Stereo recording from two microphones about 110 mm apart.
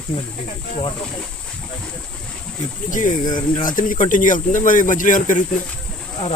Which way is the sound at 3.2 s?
40° left (ahead or behind).